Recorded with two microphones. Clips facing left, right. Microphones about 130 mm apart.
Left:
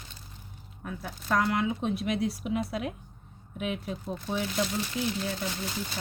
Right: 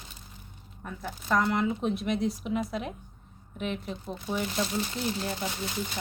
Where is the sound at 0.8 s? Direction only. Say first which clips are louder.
Right 1 dB; centre (ahead or behind).